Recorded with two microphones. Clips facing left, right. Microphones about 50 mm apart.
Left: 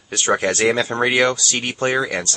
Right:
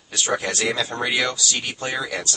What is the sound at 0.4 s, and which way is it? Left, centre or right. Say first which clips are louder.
Speech: left 6 dB; left.